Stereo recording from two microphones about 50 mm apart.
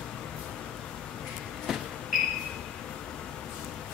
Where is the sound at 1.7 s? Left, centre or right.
Centre.